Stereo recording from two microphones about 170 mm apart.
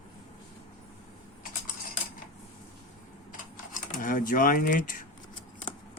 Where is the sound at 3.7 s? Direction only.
55° left (ahead or behind).